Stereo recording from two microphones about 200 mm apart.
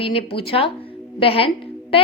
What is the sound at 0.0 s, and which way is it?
A woman's voice, 30° left (ahead or behind).